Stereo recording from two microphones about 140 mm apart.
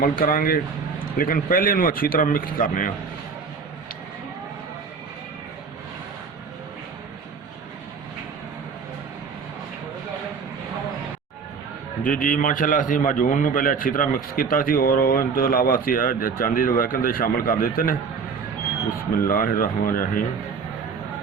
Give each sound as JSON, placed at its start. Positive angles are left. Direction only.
{"t": 0.0, "sound": "a man's voice", "side_deg": 90}
{"t": 12.0, "sound": "a man's voice", "side_deg": 75}
{"t": 19.1, "sound": "a man's voice", "side_deg": 90}